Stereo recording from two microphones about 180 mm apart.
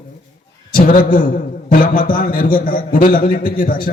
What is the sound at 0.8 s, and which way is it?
A man's voice, 50° left (ahead or behind).